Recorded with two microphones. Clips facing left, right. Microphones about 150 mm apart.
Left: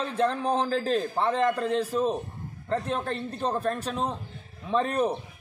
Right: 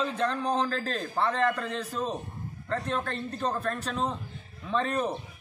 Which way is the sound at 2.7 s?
35° left (ahead or behind).